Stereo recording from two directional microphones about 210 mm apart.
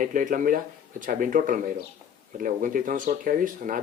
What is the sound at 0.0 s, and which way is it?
Speech, 40° right (ahead or behind).